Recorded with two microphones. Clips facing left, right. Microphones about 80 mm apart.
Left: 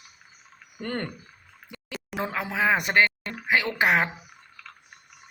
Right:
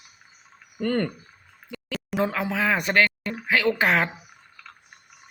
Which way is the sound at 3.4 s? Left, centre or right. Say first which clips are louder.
Even; centre.